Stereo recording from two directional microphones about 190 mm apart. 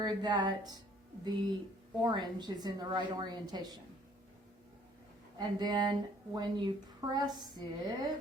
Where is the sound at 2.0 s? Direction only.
20° right (ahead or behind).